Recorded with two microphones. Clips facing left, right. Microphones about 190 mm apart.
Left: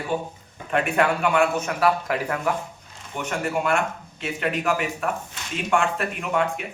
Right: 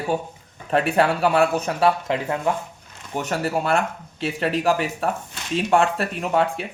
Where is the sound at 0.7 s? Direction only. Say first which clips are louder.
Right 2 dB; 35° right (ahead or behind).